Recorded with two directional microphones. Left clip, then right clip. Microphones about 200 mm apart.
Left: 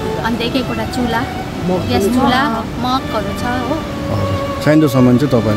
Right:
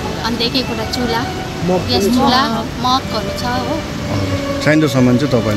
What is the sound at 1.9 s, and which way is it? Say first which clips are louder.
Speech: even; 15° left (ahead or behind).